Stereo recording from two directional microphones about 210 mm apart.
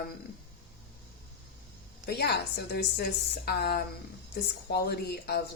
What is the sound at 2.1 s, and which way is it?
Speech, 50° left (ahead or behind).